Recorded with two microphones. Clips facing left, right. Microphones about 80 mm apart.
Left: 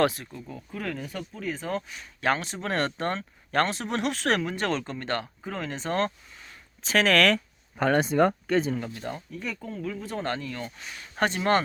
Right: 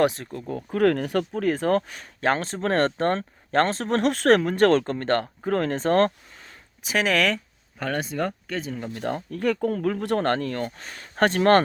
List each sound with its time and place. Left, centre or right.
0.3 s speech: right
2.2 s speech: right
6.8 s speech: centre
7.8 s speech: left
8.9 s speech: right